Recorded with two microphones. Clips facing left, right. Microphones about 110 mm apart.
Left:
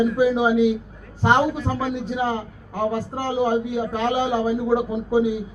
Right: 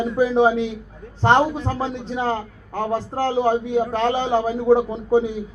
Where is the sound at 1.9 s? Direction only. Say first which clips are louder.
Even; 10° left (ahead or behind).